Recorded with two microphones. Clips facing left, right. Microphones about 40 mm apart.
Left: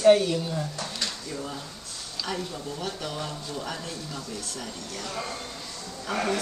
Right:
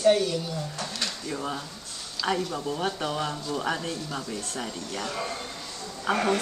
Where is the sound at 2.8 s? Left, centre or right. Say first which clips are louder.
Right 4 dB; right.